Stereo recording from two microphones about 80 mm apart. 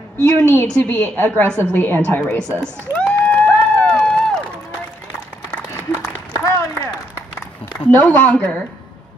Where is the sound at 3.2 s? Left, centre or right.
Centre.